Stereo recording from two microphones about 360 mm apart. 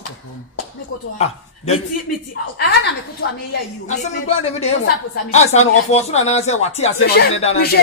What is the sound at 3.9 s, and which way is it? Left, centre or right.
Speech, centre.